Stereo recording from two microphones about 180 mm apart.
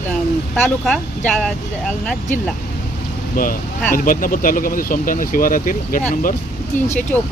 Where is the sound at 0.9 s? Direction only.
5° left (ahead or behind).